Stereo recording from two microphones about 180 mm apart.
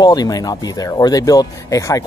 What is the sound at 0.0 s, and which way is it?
Speech, 20° left (ahead or behind).